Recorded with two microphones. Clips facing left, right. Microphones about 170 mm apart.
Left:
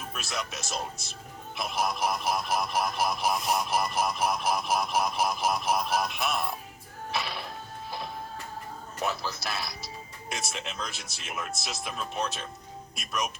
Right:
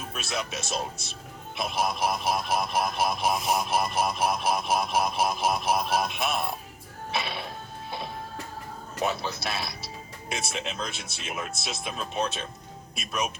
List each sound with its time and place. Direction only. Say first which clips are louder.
0.1 s speech: right 4 dB; 25° right (ahead or behind)
7.9 s music: right 2 dB; 25° right (ahead or behind)
9.0 s speech: right 2 dB; 25° right (ahead or behind)